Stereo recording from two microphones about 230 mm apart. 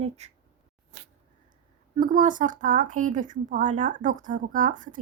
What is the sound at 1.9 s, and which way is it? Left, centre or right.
Speech, right.